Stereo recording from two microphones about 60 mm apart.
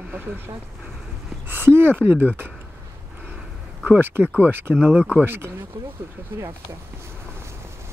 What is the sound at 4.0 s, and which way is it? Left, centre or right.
Speech, right.